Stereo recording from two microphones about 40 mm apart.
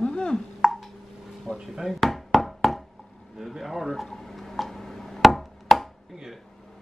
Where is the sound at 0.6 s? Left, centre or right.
Centre.